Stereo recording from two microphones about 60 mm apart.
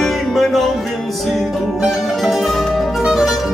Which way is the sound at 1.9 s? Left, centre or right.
Centre.